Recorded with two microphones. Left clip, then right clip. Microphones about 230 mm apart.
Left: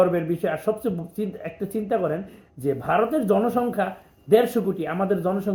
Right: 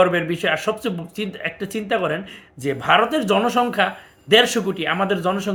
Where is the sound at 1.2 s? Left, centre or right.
Centre.